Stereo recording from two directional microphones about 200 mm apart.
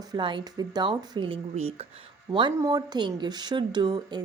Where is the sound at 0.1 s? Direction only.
25° right (ahead or behind).